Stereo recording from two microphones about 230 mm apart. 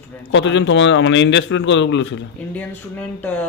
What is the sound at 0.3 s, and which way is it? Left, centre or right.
A man's voice, left.